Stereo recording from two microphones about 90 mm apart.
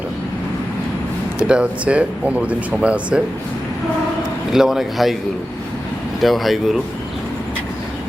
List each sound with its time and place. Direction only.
1.5 s speech: 10° right (ahead or behind)
4.5 s speech: 5° right (ahead or behind)
6.2 s speech: centre (ahead or behind)